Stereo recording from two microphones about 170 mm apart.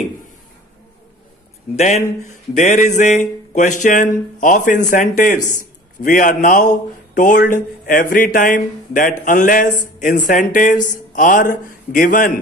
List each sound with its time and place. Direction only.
1.8 s speech: 45° left (ahead or behind)